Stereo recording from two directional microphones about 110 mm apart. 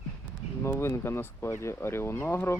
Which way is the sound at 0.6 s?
25° left (ahead or behind).